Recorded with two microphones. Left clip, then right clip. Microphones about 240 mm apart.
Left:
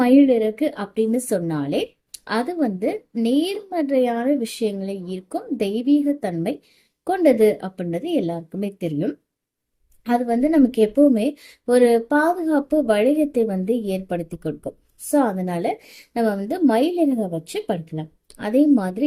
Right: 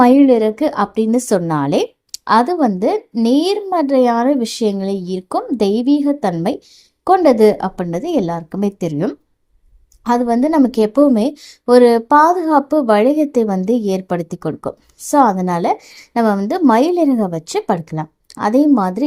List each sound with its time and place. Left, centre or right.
0.0 s a woman's voice: right